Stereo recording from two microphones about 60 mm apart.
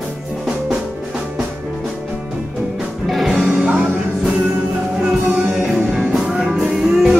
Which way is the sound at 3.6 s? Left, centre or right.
Centre.